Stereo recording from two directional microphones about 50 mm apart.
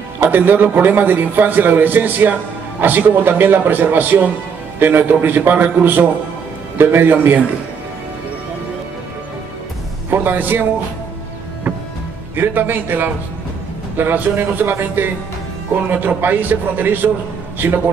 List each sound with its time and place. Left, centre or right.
0.2 s a man's voice: right
10.0 s a man's voice: right
12.4 s a man's voice: right